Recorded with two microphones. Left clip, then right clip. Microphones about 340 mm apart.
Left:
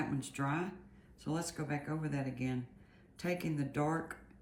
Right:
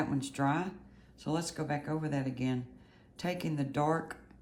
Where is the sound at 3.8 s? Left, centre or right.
Right.